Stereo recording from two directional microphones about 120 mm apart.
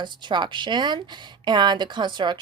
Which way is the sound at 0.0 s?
40° right (ahead or behind).